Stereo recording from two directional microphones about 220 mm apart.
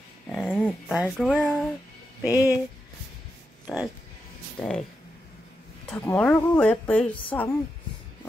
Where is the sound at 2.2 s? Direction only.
15° left (ahead or behind).